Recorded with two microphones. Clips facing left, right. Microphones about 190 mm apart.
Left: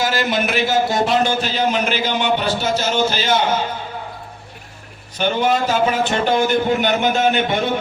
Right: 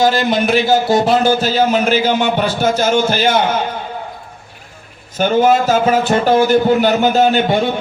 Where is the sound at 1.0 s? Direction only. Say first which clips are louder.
Right 5 dB; 40° right (ahead or behind); by 3.3 s 55° right (ahead or behind).